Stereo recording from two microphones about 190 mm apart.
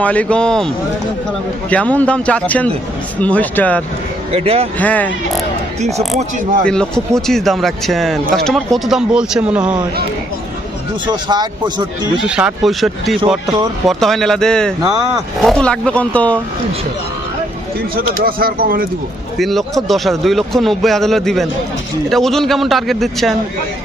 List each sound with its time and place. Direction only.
0.0 s a man's voice: 5° left (ahead or behind)
1.7 s a man's voice: 5° left (ahead or behind)
4.3 s speech: 30° right (ahead or behind)
4.8 s a man's voice: 10° left (ahead or behind)
6.7 s a man's voice: 5° left (ahead or behind)
11.0 s a man's voice: 25° right (ahead or behind)
12.3 s a man's voice: 5° right (ahead or behind)
17.9 s speech: 50° right (ahead or behind)
19.4 s a man's voice: centre (ahead or behind)